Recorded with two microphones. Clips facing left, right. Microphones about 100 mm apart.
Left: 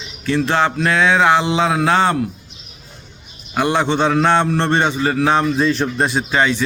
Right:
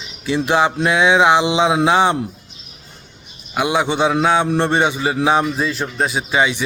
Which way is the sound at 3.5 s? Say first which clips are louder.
Left 1 dB; 10° right (ahead or behind).